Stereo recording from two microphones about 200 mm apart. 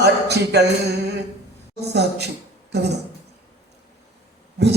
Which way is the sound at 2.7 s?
55° right (ahead or behind).